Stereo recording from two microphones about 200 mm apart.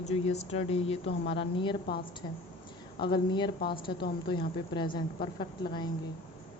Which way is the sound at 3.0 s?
20° left (ahead or behind).